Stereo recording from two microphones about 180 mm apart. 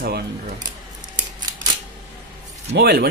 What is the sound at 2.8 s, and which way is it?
Speech, 60° right (ahead or behind).